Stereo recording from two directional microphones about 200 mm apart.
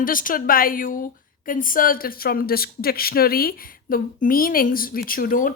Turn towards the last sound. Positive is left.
turn(degrees=45)  # may be behind; listen again after turning